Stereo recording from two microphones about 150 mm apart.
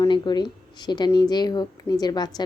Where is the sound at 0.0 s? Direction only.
30° left (ahead or behind).